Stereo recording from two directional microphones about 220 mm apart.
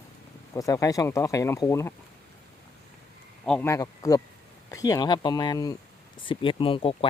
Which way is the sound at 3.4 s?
5° left (ahead or behind).